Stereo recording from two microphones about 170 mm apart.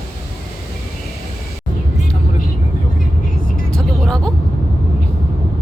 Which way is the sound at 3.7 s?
Centre (ahead or behind).